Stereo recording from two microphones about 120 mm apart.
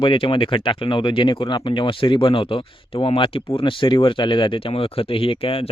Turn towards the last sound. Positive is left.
turn(degrees=50)  # may be behind; listen again after turning